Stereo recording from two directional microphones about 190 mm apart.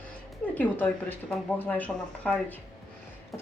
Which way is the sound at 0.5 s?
10° left (ahead or behind).